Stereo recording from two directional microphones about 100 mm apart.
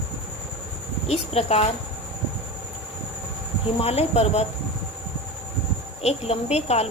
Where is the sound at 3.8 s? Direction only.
90° left.